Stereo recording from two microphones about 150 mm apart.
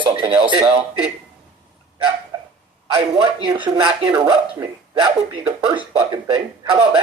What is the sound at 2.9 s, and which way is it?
Speech, 30° right (ahead or behind).